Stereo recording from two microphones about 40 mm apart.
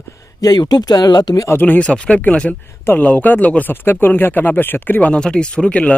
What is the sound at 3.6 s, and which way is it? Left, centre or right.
Speech, left.